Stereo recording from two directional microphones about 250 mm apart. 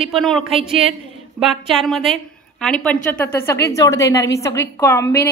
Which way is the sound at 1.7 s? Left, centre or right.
Centre.